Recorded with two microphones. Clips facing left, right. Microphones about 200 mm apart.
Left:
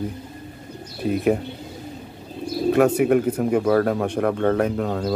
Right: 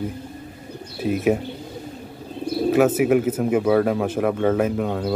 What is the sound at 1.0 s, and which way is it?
Speech, centre (ahead or behind).